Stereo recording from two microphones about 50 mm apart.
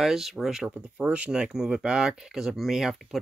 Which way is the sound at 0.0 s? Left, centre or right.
Centre.